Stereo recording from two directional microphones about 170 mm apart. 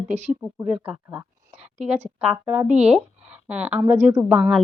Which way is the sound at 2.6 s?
40° right (ahead or behind).